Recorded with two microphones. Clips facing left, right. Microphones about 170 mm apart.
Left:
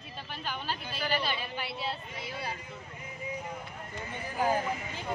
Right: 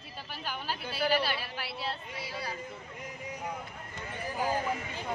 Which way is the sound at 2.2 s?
20° left (ahead or behind).